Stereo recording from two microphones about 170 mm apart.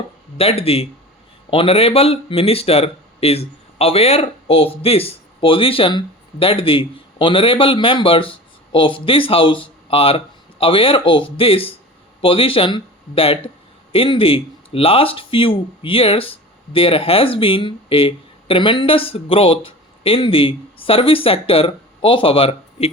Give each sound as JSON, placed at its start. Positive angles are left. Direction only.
{"t": 0.3, "sound": "speech", "side_deg": 35}